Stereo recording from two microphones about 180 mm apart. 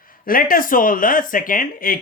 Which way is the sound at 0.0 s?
50° left (ahead or behind).